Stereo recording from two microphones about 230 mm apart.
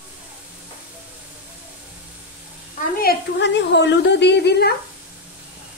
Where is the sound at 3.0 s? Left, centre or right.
Left.